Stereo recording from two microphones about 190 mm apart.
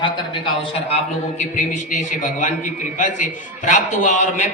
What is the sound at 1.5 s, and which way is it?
Speech, 40° left (ahead or behind).